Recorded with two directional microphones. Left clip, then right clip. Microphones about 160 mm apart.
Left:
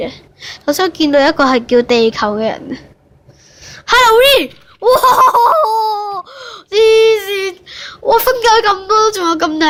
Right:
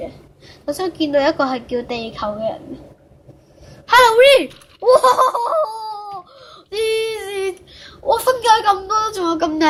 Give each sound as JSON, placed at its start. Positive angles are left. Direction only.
{"t": 0.0, "sound": "a woman's voice", "side_deg": 45}
{"t": 3.7, "sound": "speech", "side_deg": 35}